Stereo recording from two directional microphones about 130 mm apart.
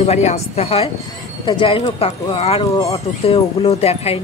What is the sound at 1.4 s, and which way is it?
Speech, 40° left (ahead or behind).